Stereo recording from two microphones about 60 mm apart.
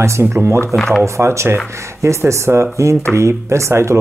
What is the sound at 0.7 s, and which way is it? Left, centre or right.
Speech, centre.